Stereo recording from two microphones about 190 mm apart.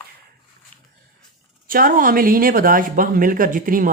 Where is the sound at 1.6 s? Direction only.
50° right (ahead or behind).